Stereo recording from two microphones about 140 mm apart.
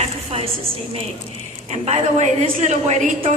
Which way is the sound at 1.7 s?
55° right (ahead or behind).